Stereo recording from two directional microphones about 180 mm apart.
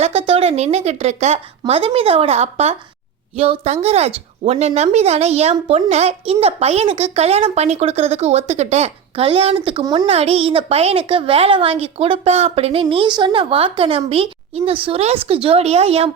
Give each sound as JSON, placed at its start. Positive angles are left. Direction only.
{"t": 0.0, "sound": "speech", "side_deg": -35}
{"t": 9.8, "sound": "a child's voice", "side_deg": -20}
{"t": 10.1, "sound": "speech", "side_deg": -35}